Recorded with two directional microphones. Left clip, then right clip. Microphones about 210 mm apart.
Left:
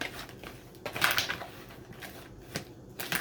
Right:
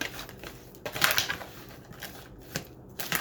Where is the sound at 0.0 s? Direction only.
5° right (ahead or behind).